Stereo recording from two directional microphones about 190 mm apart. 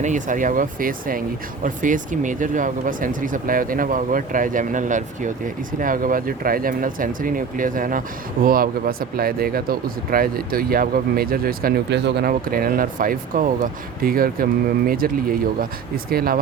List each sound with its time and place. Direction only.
0.0 s speech: 40° right (ahead or behind)